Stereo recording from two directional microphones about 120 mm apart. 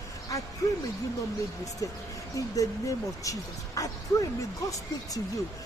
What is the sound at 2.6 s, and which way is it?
Speech, 30° left (ahead or behind).